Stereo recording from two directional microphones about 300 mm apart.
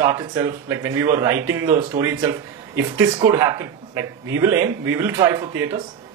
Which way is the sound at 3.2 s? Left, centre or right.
Centre.